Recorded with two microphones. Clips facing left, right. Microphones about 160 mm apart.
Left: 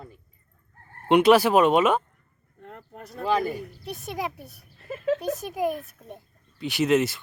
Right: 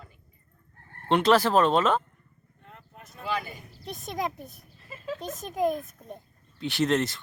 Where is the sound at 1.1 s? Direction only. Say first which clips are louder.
Left 4 dB; 15° left (ahead or behind).